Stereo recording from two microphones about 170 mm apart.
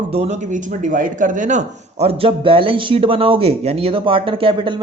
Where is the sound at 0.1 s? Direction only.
40° right (ahead or behind).